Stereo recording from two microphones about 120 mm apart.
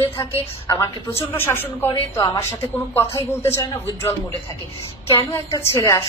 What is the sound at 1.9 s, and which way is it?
Speech, 40° left (ahead or behind).